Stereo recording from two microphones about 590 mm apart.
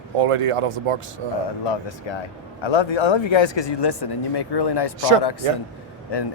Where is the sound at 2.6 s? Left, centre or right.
Left.